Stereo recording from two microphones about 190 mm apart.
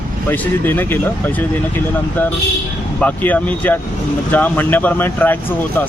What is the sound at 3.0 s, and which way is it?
Speech, 10° left (ahead or behind).